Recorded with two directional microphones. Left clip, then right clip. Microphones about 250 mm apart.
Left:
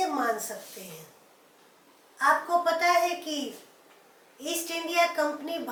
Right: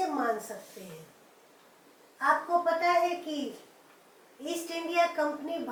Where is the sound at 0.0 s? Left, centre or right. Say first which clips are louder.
Left 2 dB; centre.